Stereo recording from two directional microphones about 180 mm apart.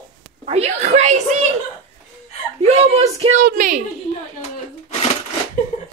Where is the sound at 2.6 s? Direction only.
35° right (ahead or behind).